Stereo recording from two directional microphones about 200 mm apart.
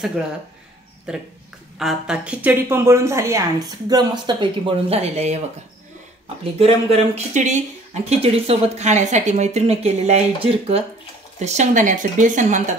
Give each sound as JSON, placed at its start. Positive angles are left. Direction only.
{"t": 1.1, "sound": "a woman's voice", "side_deg": -5}
{"t": 6.6, "sound": "speech", "side_deg": -35}